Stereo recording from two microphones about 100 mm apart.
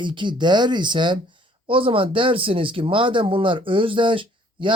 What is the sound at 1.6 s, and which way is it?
Speech, 65° right (ahead or behind).